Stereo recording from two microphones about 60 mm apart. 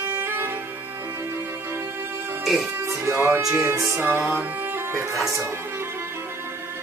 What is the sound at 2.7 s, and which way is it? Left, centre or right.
Music, right.